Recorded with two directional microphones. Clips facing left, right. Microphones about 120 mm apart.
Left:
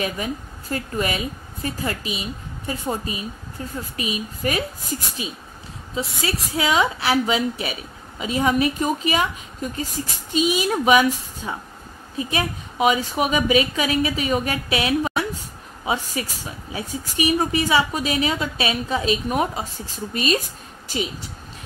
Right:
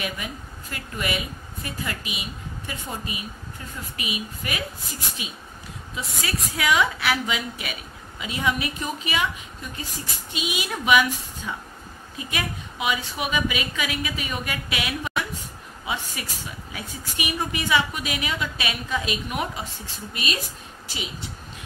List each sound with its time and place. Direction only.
0.0 s a woman's voice: 35° left (ahead or behind)